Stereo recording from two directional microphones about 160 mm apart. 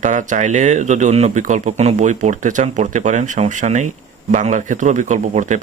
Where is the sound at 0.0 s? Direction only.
50° right (ahead or behind).